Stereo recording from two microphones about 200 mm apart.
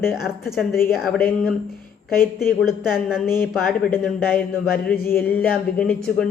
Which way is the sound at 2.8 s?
5° right (ahead or behind).